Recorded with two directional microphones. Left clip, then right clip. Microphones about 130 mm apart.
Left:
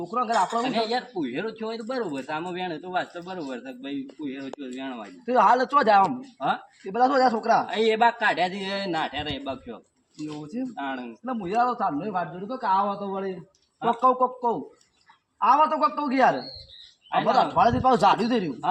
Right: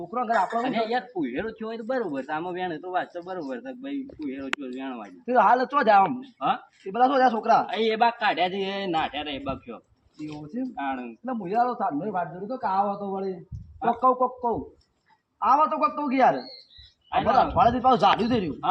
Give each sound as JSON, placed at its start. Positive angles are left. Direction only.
{"t": 0.0, "sound": "a man's voice", "side_deg": 0}
{"t": 0.6, "sound": "speech", "side_deg": 20}
{"t": 5.2, "sound": "a man's voice", "side_deg": 0}
{"t": 7.7, "sound": "speech", "side_deg": 30}
{"t": 11.3, "sound": "a man's voice", "side_deg": 5}